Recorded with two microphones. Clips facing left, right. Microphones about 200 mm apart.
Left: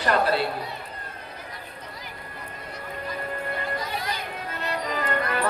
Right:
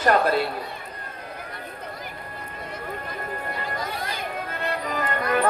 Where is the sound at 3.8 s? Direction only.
50° right (ahead or behind).